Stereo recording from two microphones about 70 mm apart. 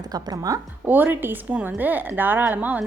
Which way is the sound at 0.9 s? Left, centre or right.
Right.